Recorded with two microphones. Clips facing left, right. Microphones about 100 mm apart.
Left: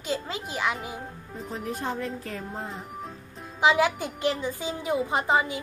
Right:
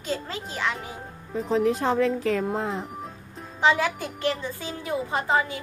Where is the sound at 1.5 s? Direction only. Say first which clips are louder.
Right 9 dB; 90° right.